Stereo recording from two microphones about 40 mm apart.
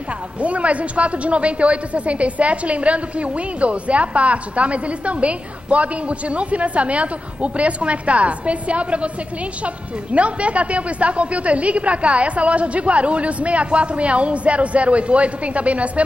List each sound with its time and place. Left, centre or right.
0.4 s a man's voice: right
10.1 s a man's voice: right